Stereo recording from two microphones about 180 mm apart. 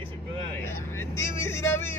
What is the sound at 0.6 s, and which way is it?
Speech, 15° left (ahead or behind).